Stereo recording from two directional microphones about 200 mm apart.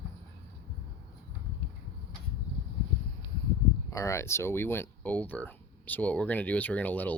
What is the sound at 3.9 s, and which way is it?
Speech, 15° left (ahead or behind).